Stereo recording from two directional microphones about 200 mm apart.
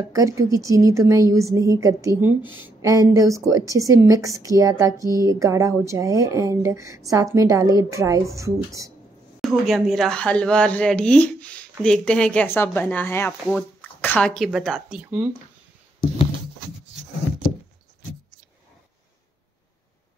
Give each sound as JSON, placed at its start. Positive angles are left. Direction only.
{"t": 0.1, "sound": "a woman's voice", "side_deg": -15}
{"t": 9.4, "sound": "speech", "side_deg": 0}